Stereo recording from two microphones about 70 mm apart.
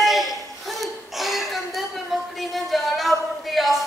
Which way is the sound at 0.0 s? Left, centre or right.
Centre.